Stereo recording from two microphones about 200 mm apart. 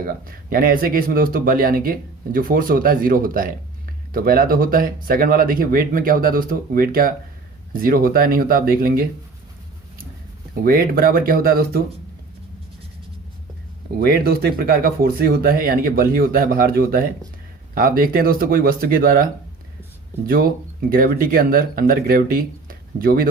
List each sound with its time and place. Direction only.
0.1 s speech: 45° right (ahead or behind)
10.6 s speech: 45° right (ahead or behind)
14.0 s speech: 50° right (ahead or behind)